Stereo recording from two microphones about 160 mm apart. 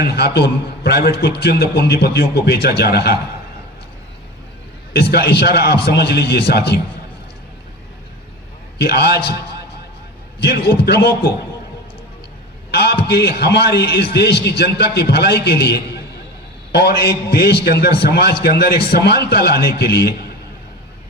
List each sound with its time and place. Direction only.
0.0 s a man's voice: 90° left
5.1 s a man's voice: 90° left
8.8 s a man's voice: 90° left
12.7 s a man's voice: 90° left